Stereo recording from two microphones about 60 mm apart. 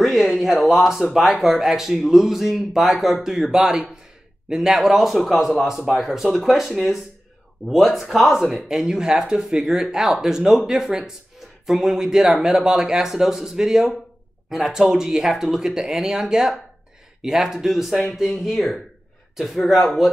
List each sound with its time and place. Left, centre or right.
0.0 s speech: centre